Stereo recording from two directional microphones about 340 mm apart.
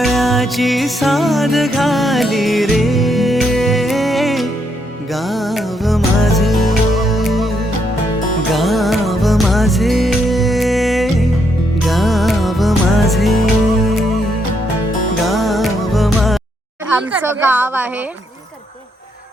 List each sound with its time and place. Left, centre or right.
0.0 s music: centre
8.5 s music: centre
15.2 s music: centre
17.1 s a woman's voice: centre